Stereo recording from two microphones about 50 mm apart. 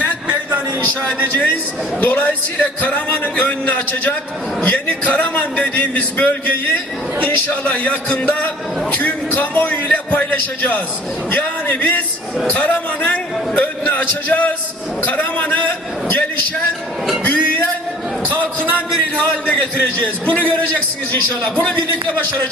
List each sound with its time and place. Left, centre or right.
0.9 s a man's voice: left
17.2 s music: left
18.9 s a man's voice: left